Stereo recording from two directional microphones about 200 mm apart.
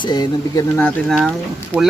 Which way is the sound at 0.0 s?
20° left (ahead or behind).